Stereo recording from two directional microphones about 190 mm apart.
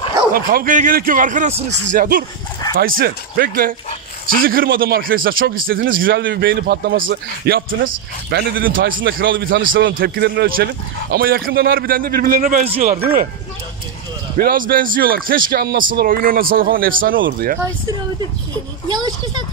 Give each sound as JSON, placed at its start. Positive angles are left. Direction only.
{"t": 0.3, "sound": "speech", "side_deg": -50}
{"t": 9.0, "sound": "a man's voice", "side_deg": -75}
{"t": 9.9, "sound": "speech", "side_deg": -60}
{"t": 14.3, "sound": "speech", "side_deg": -45}
{"t": 18.9, "sound": "a child's voice", "side_deg": -20}